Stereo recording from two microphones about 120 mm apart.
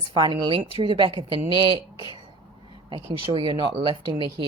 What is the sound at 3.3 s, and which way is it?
Speech, 45° right (ahead or behind).